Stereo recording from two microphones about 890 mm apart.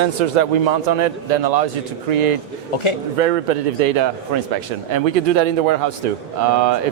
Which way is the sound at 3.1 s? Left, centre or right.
Right.